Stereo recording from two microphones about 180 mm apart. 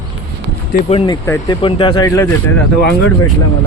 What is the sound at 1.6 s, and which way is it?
Speech, 30° left (ahead or behind).